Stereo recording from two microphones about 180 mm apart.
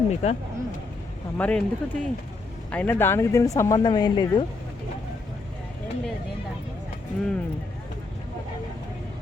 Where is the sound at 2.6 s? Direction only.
10° left (ahead or behind).